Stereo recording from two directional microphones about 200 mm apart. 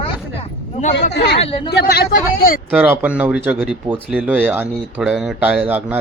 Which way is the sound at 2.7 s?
10° right (ahead or behind).